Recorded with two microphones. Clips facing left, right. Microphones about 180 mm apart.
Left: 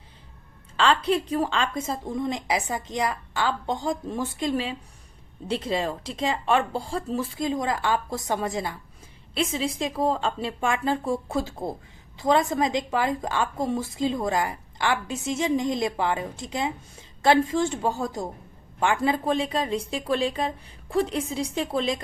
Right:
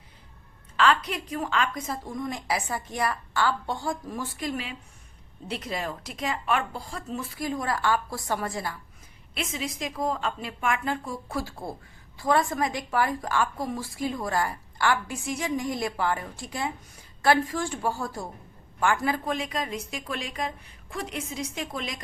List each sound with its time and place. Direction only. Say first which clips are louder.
0.8 s a woman's voice: left 2 dB; 30° left (ahead or behind)